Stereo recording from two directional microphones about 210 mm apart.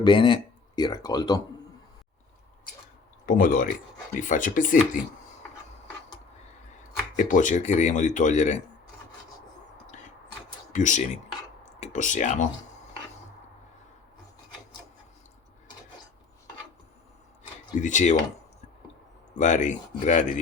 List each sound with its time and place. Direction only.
0.0 s speech: 20° left (ahead or behind)
3.2 s speech: 40° left (ahead or behind)
7.2 s speech: 35° left (ahead or behind)
9.9 s a sound: 35° left (ahead or behind)
10.7 s speech: 35° left (ahead or behind)
17.7 s speech: 35° left (ahead or behind)
19.4 s speech: 35° left (ahead or behind)